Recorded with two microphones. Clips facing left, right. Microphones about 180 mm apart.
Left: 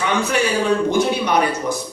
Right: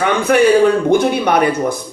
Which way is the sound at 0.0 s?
55° right (ahead or behind).